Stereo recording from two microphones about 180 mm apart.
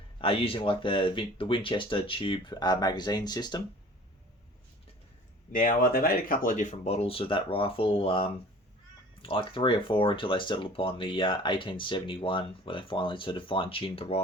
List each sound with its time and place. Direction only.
0.2 s speech: 30° left (ahead or behind)
5.5 s speech: 50° left (ahead or behind); by 14.2 s 30° left (ahead or behind)